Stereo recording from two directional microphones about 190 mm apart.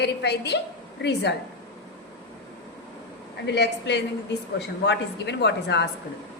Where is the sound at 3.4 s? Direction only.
65° left (ahead or behind).